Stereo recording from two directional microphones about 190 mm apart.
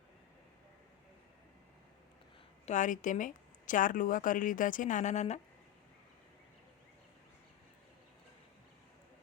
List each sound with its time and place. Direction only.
2.6 s speech: 40° left (ahead or behind)